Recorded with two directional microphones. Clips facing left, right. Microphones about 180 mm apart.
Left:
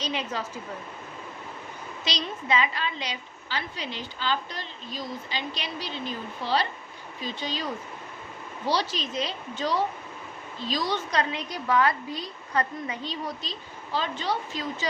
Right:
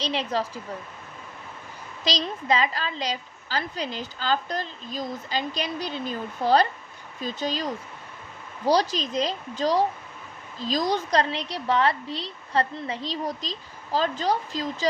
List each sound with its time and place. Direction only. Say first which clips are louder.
0.0 s a woman's voice: right 4 dB; 35° right (ahead or behind)
2.0 s a woman's voice: right 4 dB; 35° right (ahead or behind)